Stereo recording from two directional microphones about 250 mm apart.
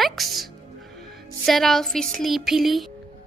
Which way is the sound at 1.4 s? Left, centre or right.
Centre.